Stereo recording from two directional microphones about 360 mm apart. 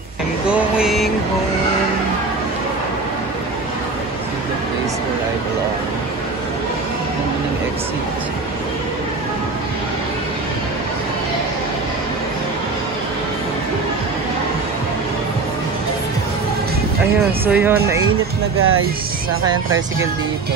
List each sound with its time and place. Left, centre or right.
0.5 s a sound: centre
17.5 s speech: centre
18.6 s speech: right
19.5 s speech: centre